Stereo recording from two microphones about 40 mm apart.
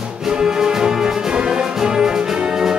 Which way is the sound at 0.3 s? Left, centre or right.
Centre.